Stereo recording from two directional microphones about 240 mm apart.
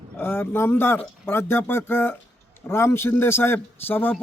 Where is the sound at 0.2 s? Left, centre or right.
Centre.